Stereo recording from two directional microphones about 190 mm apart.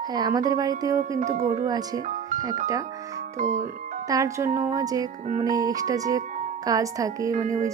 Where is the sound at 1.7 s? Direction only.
20° right (ahead or behind).